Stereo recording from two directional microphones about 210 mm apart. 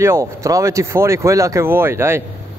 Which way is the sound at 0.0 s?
15° right (ahead or behind).